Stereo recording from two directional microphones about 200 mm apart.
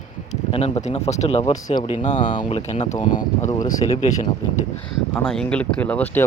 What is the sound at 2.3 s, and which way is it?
Speech, 25° left (ahead or behind).